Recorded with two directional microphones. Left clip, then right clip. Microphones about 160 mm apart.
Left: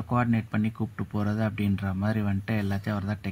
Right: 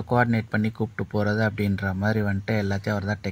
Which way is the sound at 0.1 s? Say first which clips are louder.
Right 5 dB; 10° right (ahead or behind).